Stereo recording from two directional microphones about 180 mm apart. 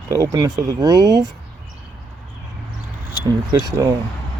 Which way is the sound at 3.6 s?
20° right (ahead or behind).